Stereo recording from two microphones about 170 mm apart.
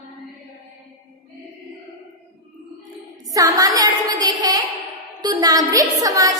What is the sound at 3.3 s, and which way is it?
A woman's voice, 20° right (ahead or behind).